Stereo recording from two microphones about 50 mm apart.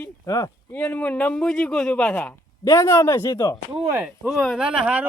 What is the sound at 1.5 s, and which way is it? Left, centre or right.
Speech, centre.